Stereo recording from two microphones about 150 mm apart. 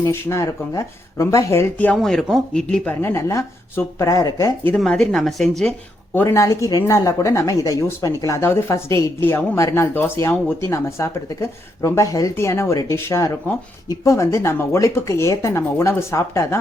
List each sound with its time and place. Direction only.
0.0 s speech: 20° left (ahead or behind)
4.6 s speech: 5° left (ahead or behind)
6.1 s speech: 20° left (ahead or behind)